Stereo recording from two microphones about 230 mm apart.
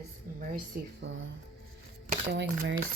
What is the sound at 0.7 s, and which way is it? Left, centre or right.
Speech, right.